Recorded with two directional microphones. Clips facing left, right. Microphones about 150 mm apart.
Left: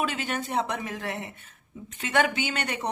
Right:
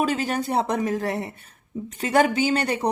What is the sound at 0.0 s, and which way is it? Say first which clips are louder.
Speech: right 6 dB; 40° right (ahead or behind).